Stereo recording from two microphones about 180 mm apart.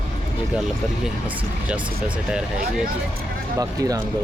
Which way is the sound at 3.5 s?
20° right (ahead or behind).